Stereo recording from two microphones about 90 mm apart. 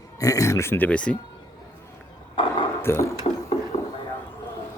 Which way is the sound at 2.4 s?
70° left (ahead or behind).